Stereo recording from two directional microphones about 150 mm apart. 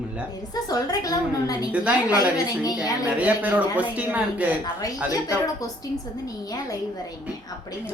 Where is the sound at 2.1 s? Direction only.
25° left (ahead or behind).